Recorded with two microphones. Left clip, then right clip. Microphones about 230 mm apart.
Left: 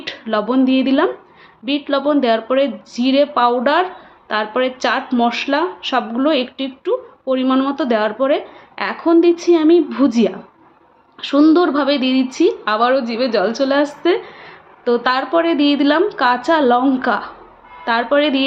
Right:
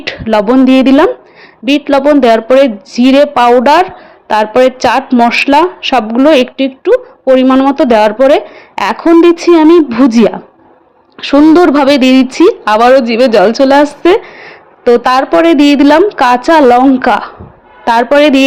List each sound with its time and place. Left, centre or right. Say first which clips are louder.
0.0 s a woman's voice: right 10 dB; right